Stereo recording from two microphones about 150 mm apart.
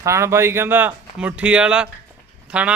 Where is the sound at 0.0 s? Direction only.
20° right (ahead or behind).